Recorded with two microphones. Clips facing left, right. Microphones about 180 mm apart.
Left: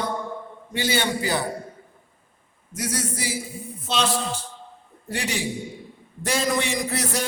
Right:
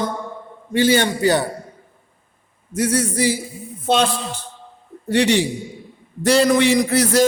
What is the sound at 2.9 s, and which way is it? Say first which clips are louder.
Speech: right 9 dB; 65° right (ahead or behind).